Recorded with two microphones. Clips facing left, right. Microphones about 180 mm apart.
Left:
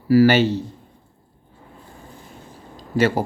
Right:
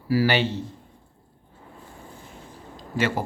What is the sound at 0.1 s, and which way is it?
Speech, 45° left (ahead or behind).